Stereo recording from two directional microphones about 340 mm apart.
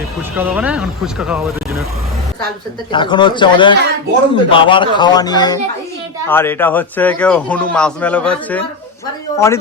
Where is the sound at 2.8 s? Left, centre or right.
Centre.